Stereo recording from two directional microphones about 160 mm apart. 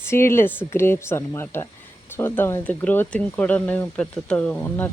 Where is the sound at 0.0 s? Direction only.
15° left (ahead or behind).